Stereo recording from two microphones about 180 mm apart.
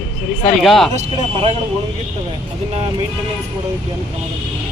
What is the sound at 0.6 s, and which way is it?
Speech, centre (ahead or behind).